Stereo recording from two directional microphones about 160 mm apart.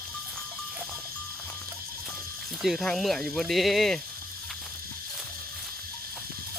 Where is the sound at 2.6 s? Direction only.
Centre (ahead or behind).